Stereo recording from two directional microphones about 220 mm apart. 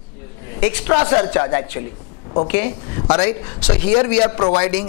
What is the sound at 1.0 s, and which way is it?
A man's voice, 25° left (ahead or behind).